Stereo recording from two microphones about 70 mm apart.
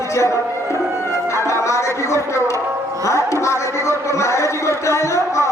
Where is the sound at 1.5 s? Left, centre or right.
Left.